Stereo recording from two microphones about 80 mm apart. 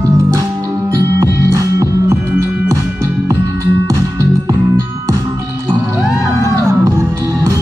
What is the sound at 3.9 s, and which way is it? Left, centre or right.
Music, right.